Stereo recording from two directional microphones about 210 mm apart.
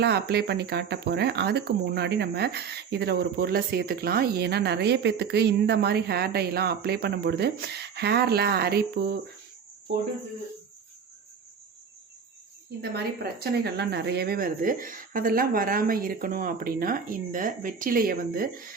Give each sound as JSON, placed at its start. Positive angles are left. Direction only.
{"t": 0.0, "sound": "speech", "side_deg": -50}
{"t": 12.8, "sound": "speech", "side_deg": -50}